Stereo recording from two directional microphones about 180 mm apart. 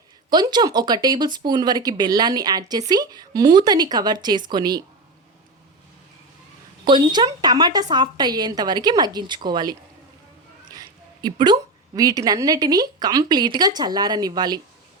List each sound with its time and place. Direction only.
0.3 s a woman's voice: 25° right (ahead or behind)
6.8 s a woman's voice: 25° right (ahead or behind)
10.8 s a woman's voice: 25° right (ahead or behind)